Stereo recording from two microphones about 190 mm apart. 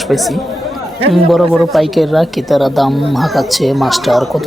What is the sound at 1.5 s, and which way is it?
Speech, centre (ahead or behind).